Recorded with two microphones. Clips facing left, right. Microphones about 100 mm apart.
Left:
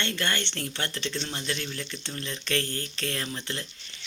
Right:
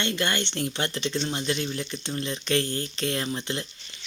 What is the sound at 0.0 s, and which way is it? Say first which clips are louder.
Speech: right 3 dB; 15° right (ahead or behind).